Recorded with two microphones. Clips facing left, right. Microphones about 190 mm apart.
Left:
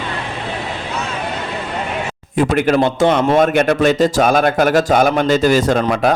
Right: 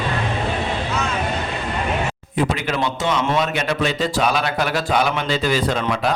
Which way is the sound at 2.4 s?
50° left (ahead or behind).